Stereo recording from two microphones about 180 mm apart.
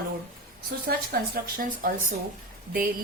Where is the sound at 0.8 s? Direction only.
55° right (ahead or behind).